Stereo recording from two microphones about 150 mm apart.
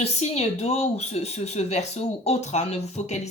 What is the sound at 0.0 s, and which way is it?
Speech, 45° left (ahead or behind).